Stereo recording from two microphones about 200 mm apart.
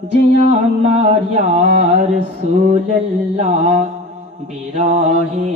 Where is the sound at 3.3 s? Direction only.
35° right (ahead or behind).